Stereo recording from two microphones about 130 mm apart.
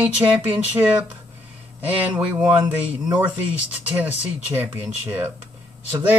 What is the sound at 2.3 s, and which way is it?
Speech, 10° right (ahead or behind).